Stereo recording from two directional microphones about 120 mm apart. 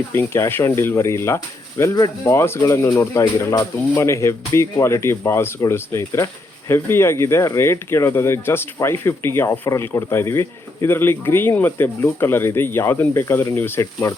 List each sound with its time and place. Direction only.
0.1 s speech: 20° left (ahead or behind)